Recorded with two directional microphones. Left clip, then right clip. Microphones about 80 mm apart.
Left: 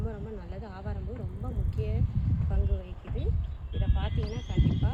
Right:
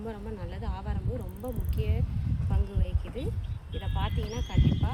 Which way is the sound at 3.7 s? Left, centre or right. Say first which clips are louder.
Right 3 dB; left.